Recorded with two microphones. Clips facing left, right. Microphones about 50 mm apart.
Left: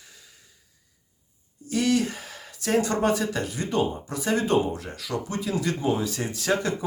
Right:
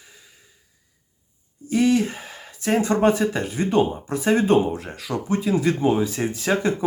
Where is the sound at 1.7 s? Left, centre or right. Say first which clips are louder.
Right 4 dB; right.